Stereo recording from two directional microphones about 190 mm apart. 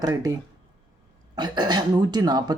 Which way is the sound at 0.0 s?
20° right (ahead or behind).